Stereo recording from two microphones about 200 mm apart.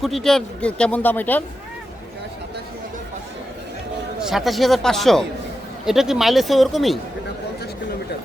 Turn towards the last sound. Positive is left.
turn(degrees=0)  # may be behind; listen again after turning